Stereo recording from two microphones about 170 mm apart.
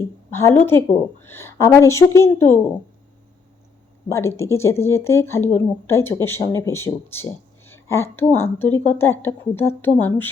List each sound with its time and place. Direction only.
0.3 s a woman's voice: 15° left (ahead or behind)
4.1 s speech: 15° left (ahead or behind)